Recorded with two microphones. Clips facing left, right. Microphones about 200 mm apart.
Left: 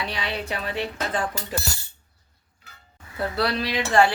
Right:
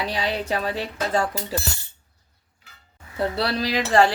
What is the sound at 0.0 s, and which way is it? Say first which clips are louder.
Speech: right 4 dB; 40° right (ahead or behind).